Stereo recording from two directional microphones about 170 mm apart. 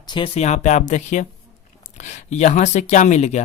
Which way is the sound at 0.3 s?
40° left (ahead or behind).